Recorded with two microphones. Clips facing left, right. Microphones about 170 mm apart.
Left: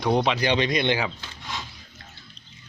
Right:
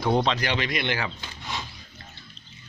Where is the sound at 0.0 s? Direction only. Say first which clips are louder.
Left 1 dB; centre (ahead or behind).